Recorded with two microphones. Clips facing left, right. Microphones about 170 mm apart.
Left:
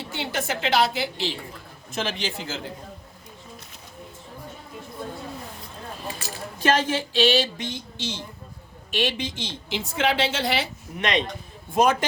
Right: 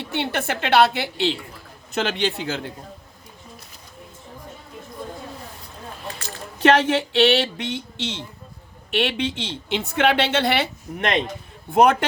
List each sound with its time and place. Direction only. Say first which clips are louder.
0.0 s a woman's voice: right 4 dB; 60° right (ahead or behind)
6.6 s a woman's voice: right 5 dB; 65° right (ahead or behind)
11.7 s a woman's voice: right 4 dB; 65° right (ahead or behind)